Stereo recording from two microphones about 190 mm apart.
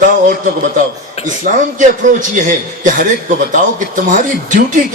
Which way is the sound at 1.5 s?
45° right (ahead or behind).